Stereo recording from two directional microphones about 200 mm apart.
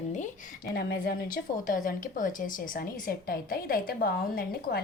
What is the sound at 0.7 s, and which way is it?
A woman's voice, 50° left (ahead or behind).